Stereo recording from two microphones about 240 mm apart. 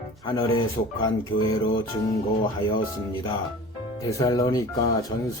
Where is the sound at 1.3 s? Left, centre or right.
Left.